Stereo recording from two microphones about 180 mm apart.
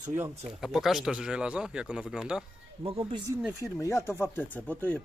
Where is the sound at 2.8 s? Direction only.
30° right (ahead or behind).